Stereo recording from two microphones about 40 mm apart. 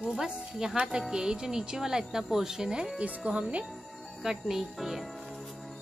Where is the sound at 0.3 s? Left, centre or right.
Right.